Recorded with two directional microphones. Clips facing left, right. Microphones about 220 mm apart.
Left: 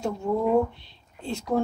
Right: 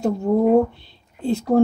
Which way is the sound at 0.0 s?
40° right (ahead or behind).